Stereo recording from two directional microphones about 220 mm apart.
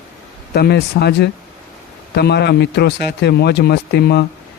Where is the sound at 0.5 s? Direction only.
45° left (ahead or behind).